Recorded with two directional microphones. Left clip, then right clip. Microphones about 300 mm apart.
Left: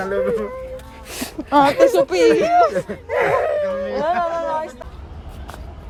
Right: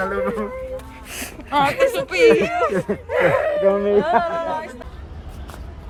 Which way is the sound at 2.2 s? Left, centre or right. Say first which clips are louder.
Right 1 dB; left.